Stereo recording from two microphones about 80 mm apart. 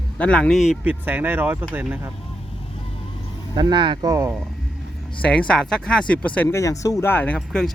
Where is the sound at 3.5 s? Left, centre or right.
Right.